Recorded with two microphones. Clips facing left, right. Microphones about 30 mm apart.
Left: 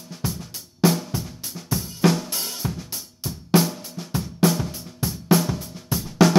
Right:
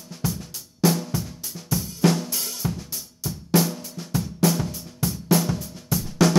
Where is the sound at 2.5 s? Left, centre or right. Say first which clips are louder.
Even; centre.